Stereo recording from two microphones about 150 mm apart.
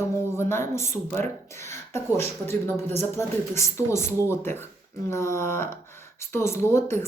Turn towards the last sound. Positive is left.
turn(degrees=15)  # may be behind; listen again after turning